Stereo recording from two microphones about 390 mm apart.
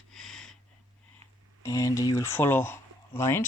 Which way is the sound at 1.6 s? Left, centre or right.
Centre.